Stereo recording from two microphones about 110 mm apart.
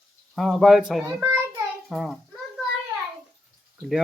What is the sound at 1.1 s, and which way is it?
Speech, 15° right (ahead or behind).